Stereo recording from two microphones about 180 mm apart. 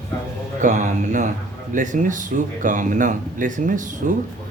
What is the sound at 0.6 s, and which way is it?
Speech, 45° right (ahead or behind).